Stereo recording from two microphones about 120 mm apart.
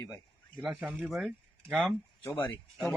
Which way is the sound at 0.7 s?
10° right (ahead or behind).